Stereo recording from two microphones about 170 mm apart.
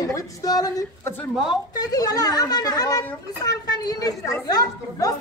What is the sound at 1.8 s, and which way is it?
A woman's voice, 20° left (ahead or behind).